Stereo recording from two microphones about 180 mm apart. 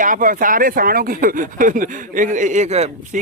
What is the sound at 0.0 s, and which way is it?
Speech, 50° right (ahead or behind).